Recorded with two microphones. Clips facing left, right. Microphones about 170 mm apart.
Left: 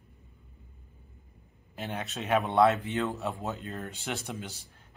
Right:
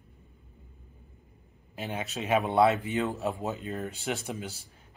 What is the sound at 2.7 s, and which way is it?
Speech, 15° right (ahead or behind).